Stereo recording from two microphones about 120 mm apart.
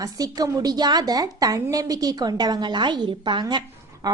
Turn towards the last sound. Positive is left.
turn(degrees=-35)  # may be behind; listen again after turning